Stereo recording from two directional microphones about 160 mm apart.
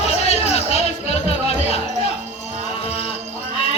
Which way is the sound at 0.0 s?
40° left (ahead or behind).